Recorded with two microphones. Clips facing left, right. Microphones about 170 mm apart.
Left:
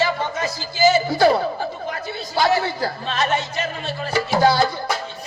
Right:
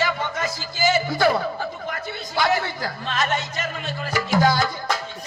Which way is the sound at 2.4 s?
40° left (ahead or behind).